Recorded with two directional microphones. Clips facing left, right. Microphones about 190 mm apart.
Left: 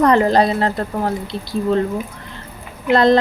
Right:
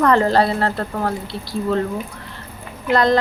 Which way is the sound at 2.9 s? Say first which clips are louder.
Left 3 dB; 25° left (ahead or behind).